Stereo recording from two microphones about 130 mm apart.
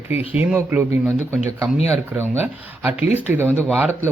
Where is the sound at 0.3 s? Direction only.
15° right (ahead or behind).